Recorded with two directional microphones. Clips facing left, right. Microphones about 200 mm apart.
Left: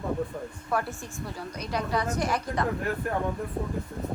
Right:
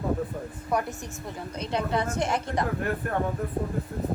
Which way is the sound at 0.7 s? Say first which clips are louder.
Right 2 dB; 15° right (ahead or behind).